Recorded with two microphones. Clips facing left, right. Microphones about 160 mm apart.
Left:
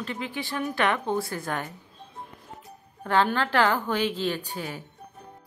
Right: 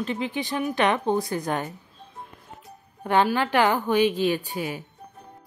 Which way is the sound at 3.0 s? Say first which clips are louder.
Right 2 dB; 15° right (ahead or behind).